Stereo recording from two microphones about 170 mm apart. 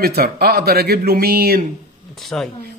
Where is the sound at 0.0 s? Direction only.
65° right (ahead or behind).